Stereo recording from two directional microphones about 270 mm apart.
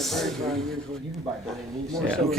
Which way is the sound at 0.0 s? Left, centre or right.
Centre.